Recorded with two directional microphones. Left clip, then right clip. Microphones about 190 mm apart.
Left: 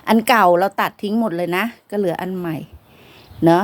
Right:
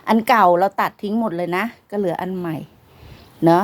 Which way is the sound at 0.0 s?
15° left (ahead or behind).